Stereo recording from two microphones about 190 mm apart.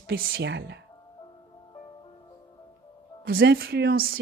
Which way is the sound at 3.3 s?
60° right (ahead or behind).